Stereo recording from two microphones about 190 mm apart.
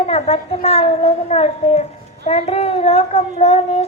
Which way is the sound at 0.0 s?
30° left (ahead or behind).